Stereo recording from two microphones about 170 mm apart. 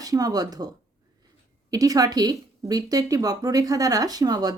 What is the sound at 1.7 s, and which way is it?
Speech, 20° right (ahead or behind).